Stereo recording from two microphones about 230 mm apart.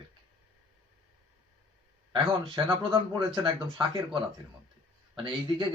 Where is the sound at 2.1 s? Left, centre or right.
Right.